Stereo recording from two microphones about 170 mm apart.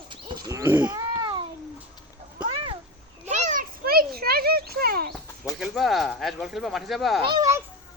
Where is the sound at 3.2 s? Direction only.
45° right (ahead or behind); by 5.1 s 65° right (ahead or behind).